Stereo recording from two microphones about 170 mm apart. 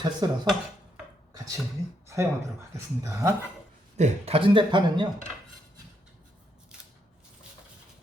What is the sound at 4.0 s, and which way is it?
Speech, 35° right (ahead or behind).